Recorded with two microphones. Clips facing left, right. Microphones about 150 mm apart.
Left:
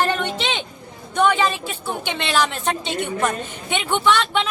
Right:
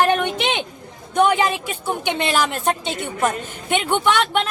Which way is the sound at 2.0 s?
45° right (ahead or behind).